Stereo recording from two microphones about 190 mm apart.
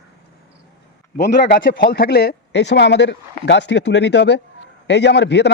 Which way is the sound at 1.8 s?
55° left (ahead or behind).